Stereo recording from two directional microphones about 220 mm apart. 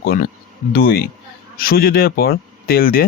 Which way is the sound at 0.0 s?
40° left (ahead or behind).